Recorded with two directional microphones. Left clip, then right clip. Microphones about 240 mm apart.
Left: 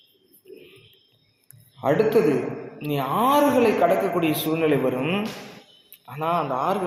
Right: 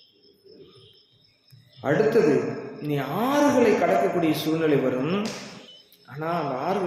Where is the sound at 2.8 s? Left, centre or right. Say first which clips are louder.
Left 5 dB; centre.